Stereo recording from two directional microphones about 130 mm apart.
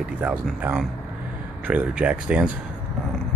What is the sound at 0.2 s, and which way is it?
Speech, 10° right (ahead or behind).